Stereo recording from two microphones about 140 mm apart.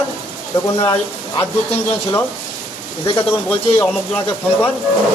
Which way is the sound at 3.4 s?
10° left (ahead or behind).